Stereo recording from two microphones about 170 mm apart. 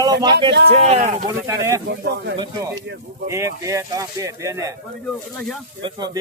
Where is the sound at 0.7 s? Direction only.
40° right (ahead or behind).